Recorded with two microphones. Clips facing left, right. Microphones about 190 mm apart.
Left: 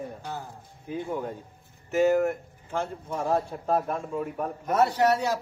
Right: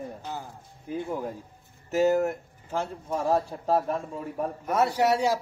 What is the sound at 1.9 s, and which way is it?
Speech, 40° right (ahead or behind).